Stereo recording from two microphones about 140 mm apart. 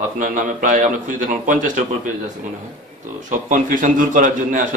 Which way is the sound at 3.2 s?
70° right (ahead or behind).